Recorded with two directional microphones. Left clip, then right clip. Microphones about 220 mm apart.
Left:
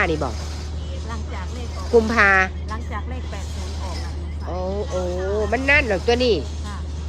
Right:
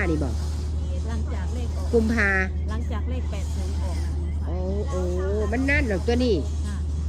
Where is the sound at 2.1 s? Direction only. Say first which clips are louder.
Left 7 dB; 10° left (ahead or behind).